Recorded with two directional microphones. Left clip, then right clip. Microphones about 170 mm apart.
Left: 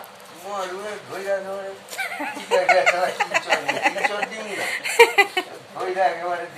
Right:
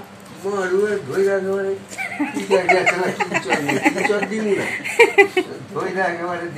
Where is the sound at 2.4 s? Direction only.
30° left (ahead or behind).